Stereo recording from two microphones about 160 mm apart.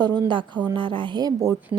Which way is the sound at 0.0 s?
30° right (ahead or behind).